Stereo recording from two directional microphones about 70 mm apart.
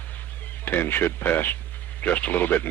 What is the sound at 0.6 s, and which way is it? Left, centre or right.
Speech, left.